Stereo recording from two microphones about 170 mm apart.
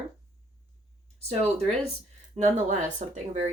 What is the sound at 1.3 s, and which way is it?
Speech, 40° right (ahead or behind).